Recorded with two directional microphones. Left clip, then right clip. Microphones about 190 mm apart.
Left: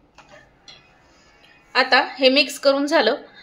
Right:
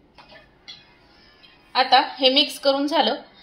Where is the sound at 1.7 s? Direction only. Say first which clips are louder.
Even; 40° left (ahead or behind).